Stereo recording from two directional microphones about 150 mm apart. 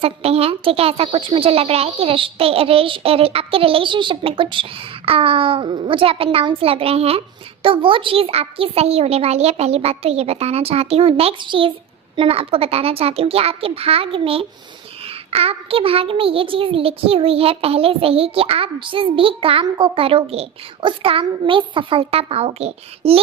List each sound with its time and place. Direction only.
0.0 s a child's voice: 40° right (ahead or behind)